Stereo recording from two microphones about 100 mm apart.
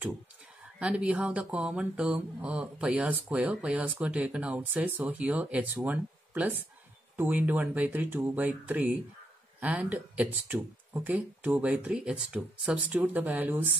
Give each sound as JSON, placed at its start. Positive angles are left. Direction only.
{"t": 0.7, "sound": "speech", "side_deg": -10}